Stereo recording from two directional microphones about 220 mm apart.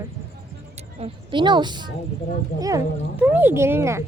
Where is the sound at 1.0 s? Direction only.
20° right (ahead or behind).